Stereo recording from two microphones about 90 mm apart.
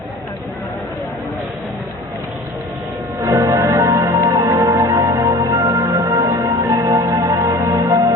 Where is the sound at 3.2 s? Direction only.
35° right (ahead or behind).